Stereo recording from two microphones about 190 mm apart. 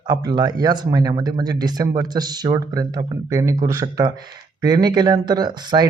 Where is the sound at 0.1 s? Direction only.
20° right (ahead or behind).